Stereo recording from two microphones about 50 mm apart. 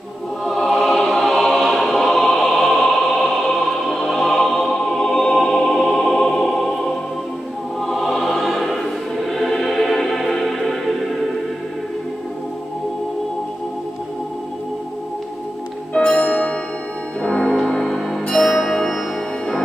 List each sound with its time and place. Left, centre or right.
0.5 s music: centre
0.9 s choir: centre
7.8 s music: centre
15.9 s music: left
17.6 s music: centre